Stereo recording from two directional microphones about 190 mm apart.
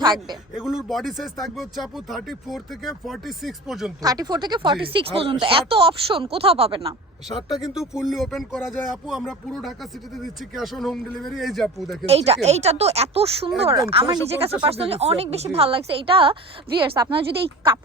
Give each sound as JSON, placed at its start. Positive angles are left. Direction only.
{"t": 0.0, "sound": "speech", "side_deg": -20}
{"t": 0.5, "sound": "speech", "side_deg": -5}
{"t": 4.0, "sound": "speech", "side_deg": -20}
{"t": 7.3, "sound": "speech", "side_deg": 0}
{"t": 12.0, "sound": "speech", "side_deg": -30}